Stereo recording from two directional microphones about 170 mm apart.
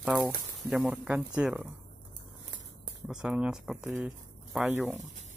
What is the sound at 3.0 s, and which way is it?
Speech, 5° right (ahead or behind).